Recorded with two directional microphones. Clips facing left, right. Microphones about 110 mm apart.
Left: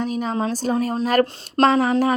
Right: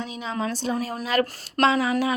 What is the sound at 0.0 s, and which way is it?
Speech, 50° left (ahead or behind).